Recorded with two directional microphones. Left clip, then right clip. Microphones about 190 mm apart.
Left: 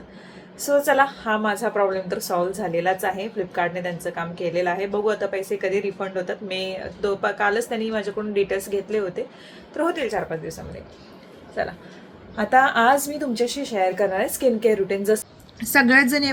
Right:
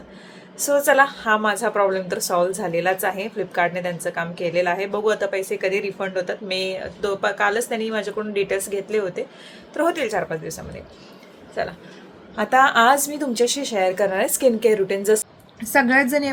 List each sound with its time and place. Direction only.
0.6 s a woman's voice: 15° right (ahead or behind)